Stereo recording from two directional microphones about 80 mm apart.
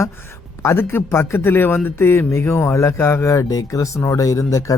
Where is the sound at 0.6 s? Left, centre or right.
Left.